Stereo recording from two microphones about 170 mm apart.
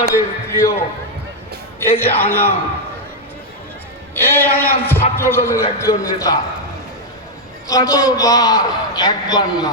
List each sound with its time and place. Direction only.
0.1 s speech: 15° left (ahead or behind)
1.9 s a man's voice: 10° left (ahead or behind)
4.1 s a man's voice: 10° left (ahead or behind)
7.7 s a man's voice: 20° left (ahead or behind)